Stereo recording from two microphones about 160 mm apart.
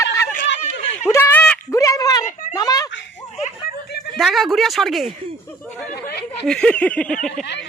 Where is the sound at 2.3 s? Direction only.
50° left (ahead or behind).